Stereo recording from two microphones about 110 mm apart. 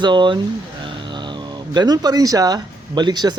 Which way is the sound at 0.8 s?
45° right (ahead or behind).